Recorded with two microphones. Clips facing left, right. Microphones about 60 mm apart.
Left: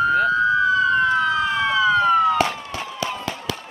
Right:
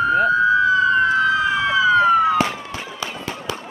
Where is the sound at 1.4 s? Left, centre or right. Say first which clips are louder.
Right 2 dB; centre.